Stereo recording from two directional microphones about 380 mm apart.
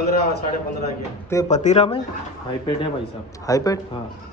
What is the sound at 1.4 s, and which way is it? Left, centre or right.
Speech, centre.